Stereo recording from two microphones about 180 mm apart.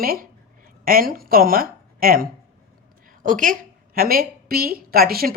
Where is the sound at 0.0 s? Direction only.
55° right (ahead or behind).